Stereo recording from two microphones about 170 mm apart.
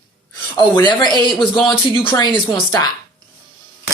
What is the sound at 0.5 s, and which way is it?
Speech, 25° left (ahead or behind).